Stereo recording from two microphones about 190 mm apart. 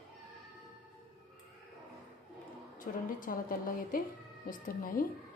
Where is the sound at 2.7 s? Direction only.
45° left (ahead or behind).